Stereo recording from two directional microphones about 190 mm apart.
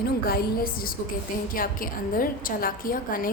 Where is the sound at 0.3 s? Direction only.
55° left (ahead or behind).